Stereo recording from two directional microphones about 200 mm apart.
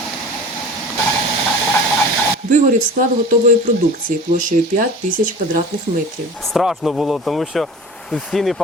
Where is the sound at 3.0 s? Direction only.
40° right (ahead or behind).